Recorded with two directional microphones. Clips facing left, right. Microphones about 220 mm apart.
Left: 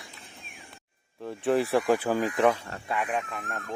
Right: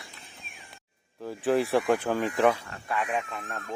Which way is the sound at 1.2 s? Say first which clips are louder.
Even; centre (ahead or behind).